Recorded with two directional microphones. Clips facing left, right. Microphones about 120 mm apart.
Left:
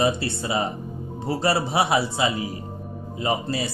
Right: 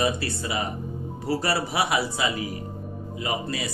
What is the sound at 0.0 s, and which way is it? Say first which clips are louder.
A man's voice: left 3 dB; 25° left (ahead or behind).